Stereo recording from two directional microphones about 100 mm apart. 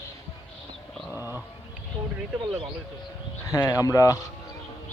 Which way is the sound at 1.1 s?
20° right (ahead or behind).